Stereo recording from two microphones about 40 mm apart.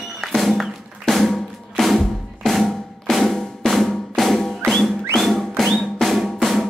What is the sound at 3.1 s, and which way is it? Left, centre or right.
Drum, centre.